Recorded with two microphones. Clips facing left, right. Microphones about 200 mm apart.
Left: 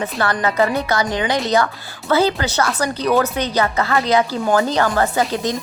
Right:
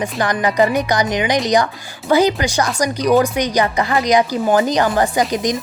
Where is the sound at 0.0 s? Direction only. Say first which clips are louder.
Right 2 dB; 15° right (ahead or behind).